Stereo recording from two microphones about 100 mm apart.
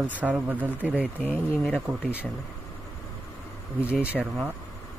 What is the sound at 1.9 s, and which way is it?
Speech, 15° right (ahead or behind).